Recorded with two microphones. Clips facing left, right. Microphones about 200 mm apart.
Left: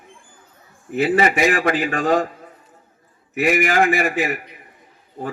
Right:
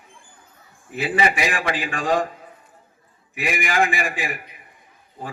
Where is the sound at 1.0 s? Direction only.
45° left (ahead or behind).